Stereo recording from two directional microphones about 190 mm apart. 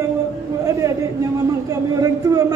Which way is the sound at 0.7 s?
15° right (ahead or behind).